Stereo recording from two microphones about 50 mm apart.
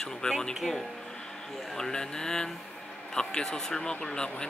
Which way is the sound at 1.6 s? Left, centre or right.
Centre.